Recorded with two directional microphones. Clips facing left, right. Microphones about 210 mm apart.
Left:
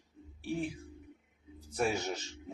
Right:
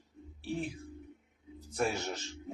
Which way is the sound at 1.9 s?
10° left (ahead or behind).